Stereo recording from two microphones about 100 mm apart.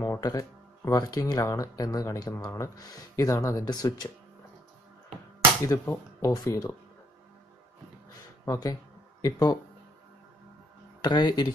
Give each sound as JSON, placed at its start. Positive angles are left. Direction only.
{"t": 0.0, "sound": "speech", "side_deg": 35}
{"t": 5.9, "sound": "speech", "side_deg": 35}
{"t": 8.5, "sound": "speech", "side_deg": 40}
{"t": 11.0, "sound": "speech", "side_deg": 45}